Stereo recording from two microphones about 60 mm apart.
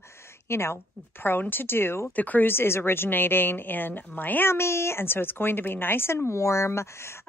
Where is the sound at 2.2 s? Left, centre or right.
Left.